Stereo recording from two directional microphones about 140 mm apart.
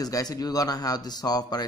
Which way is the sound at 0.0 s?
25° left (ahead or behind).